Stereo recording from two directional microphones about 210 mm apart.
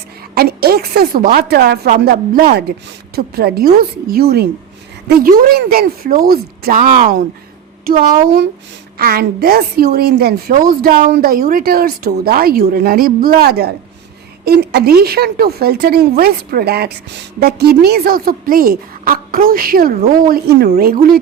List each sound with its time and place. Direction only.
0.3 s a woman's voice: 45° right (ahead or behind)